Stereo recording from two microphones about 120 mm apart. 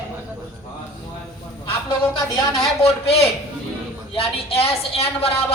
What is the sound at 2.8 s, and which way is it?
Speech, 55° left (ahead or behind).